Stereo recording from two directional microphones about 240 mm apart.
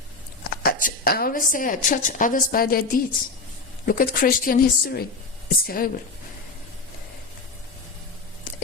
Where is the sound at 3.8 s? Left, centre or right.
Left.